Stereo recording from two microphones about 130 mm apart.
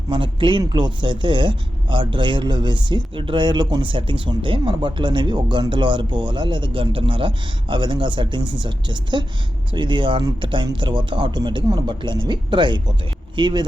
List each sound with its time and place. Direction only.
0.1 s speech: 40° right (ahead or behind)